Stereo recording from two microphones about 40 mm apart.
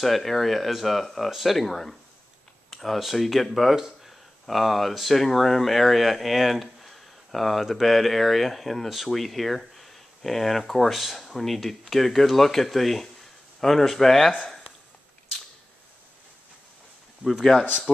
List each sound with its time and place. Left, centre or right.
0.0 s speech: centre
2.7 s a sound: centre
3.0 s speech: centre
3.7 s speech: centre
4.5 s speech: centre
17.2 s speech: centre
17.9 s speech: right